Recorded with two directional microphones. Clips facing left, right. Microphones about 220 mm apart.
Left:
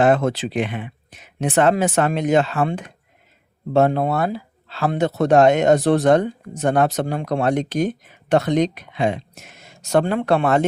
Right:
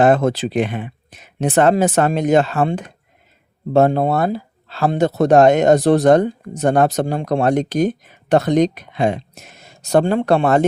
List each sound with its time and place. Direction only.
0.0 s speech: 40° right (ahead or behind)